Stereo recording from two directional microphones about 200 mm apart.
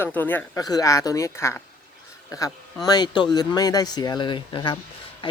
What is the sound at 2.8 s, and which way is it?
Speech, 20° left (ahead or behind).